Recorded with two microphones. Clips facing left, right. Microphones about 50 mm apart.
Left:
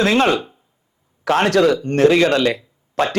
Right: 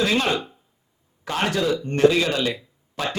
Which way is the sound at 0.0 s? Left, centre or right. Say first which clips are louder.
Left 6 dB; left.